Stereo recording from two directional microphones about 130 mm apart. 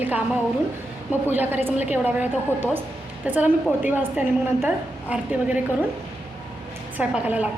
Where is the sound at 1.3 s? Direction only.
15° right (ahead or behind).